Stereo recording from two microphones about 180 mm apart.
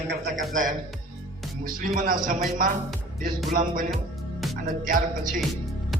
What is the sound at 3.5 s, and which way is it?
A man's voice, 50° right (ahead or behind).